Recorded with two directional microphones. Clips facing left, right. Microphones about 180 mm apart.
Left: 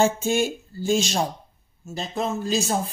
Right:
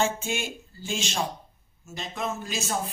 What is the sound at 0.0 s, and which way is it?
Speech, 40° left (ahead or behind).